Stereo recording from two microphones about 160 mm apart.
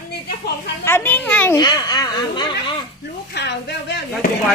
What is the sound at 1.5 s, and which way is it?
Speech, 25° left (ahead or behind).